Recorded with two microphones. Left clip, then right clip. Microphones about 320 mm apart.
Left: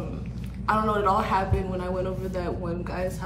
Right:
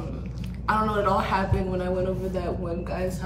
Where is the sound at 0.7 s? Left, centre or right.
Centre.